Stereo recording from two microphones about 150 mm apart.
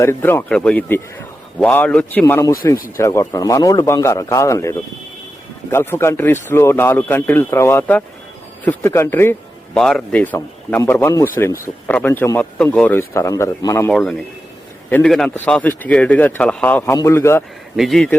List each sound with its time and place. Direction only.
0.0 s speech: 15° left (ahead or behind)
9.7 s a man's voice: 5° left (ahead or behind); by 13.9 s 20° left (ahead or behind)
13.9 s speech: 5° left (ahead or behind)
17.7 s speech: centre (ahead or behind)